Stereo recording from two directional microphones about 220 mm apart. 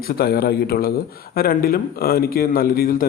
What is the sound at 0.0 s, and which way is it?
Speech, 45° left (ahead or behind).